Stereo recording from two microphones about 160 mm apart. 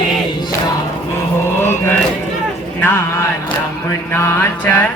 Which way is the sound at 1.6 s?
15° left (ahead or behind).